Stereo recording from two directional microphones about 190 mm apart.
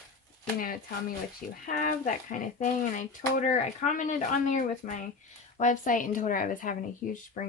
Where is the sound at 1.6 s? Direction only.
45° left (ahead or behind).